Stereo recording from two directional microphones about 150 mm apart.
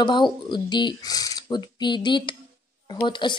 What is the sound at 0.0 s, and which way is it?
A woman's voice, 30° left (ahead or behind).